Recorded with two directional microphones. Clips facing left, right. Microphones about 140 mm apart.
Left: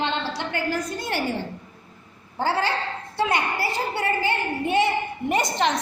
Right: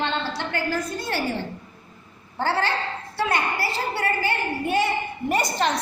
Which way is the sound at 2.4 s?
15° left (ahead or behind).